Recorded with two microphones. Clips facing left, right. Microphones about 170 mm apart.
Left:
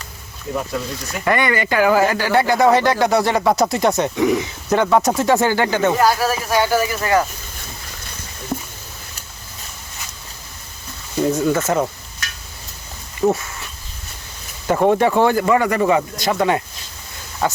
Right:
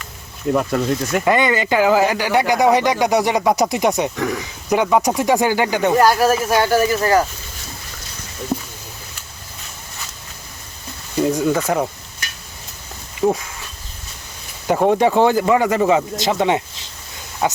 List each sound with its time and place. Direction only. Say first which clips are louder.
0.5 s speech: right 6 dB; 60° right (ahead or behind)
1.2 s speech: left 1 dB; 20° right (ahead or behind)
4.1 s speech: left 6 dB; 15° left (ahead or behind)
4.7 s speech: even; 10° right (ahead or behind)
6.1 s speech: right 3 dB; 45° right (ahead or behind)
11.3 s speech: even; 15° right (ahead or behind)
13.2 s speech: even; 15° right (ahead or behind)
14.7 s speech: even; 15° right (ahead or behind)